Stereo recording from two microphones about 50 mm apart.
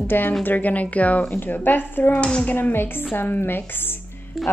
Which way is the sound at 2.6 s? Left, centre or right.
Left.